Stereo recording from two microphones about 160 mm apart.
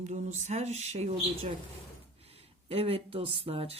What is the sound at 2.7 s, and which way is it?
Speech, 35° right (ahead or behind).